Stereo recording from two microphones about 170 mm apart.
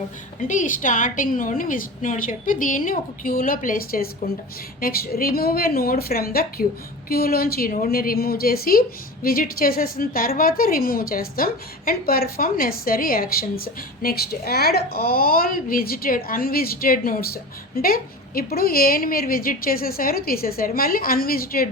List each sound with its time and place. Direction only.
0.4 s a woman's voice: 50° left (ahead or behind)